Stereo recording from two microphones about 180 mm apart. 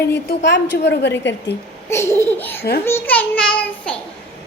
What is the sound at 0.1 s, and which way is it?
A woman's voice, 75° left (ahead or behind).